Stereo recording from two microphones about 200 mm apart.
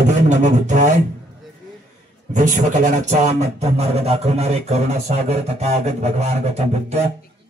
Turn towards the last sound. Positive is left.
turn(degrees=-35)  # may be behind; listen again after turning